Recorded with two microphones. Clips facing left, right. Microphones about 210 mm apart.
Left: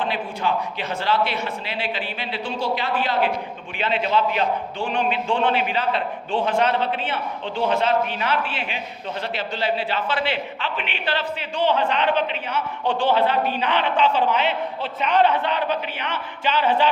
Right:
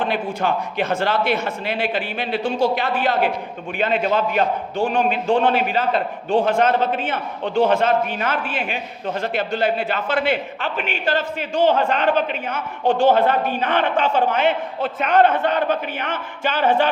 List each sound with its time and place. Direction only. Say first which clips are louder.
0.0 s a man's voice: right 3 dB; 50° right (ahead or behind)